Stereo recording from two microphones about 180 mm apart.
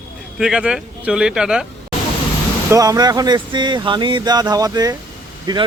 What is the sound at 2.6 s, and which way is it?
Speech, 20° right (ahead or behind).